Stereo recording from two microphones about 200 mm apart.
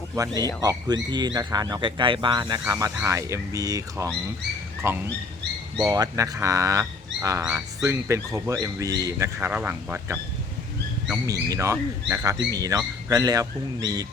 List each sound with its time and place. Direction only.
0.2 s speech: 15° right (ahead or behind)